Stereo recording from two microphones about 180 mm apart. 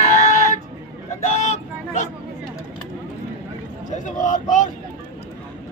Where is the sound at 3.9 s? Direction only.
45° left (ahead or behind).